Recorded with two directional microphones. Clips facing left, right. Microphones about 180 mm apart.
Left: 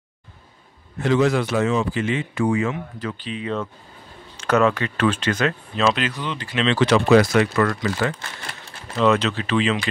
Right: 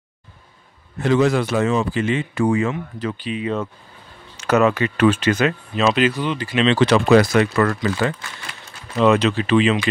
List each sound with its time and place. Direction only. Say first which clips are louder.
1.0 s speech: right 2 dB; 45° right (ahead or behind)
3.2 s speech: right 3 dB; 10° right (ahead or behind)
6.8 s speech: even; 35° right (ahead or behind)
9.0 s speech: right 3 dB; 15° right (ahead or behind)